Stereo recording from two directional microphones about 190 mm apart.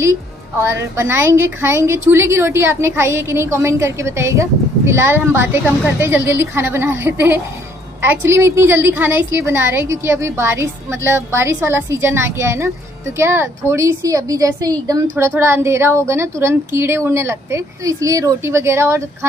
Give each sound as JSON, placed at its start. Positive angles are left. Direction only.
{"t": 0.0, "sound": "a woman's voice", "side_deg": -15}